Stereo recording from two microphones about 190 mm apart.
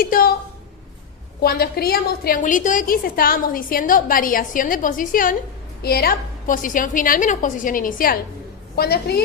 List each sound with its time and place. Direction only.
0.0 s a woman's voice: 50° left (ahead or behind)
1.4 s a woman's voice: 55° left (ahead or behind)